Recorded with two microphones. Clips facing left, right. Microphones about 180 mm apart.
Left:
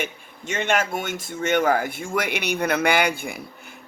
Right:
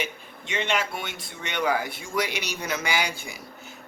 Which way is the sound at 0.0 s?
45° left (ahead or behind).